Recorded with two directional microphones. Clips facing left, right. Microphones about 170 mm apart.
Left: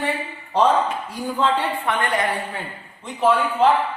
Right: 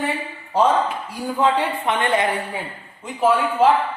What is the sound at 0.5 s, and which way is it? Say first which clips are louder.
Speech: even; 10° right (ahead or behind).